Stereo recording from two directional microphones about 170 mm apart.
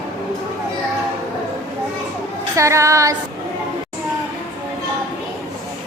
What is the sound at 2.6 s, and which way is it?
Female singing, 15° right (ahead or behind).